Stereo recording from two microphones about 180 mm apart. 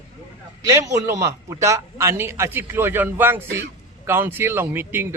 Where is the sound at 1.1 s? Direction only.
15° right (ahead or behind).